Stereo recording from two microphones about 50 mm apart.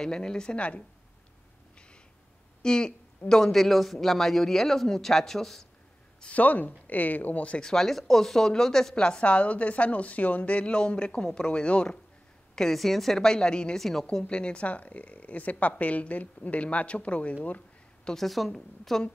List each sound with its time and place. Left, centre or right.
0.0 s a man's voice: centre
2.6 s a woman's voice: centre
6.2 s speech: left
7.6 s a man's voice: centre
12.5 s a man's voice: centre
13.7 s a woman's voice: centre
14.0 s speech: left
18.0 s a woman's voice: centre